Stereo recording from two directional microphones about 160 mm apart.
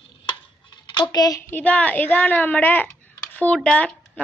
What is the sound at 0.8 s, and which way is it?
A woman's voice, 25° left (ahead or behind).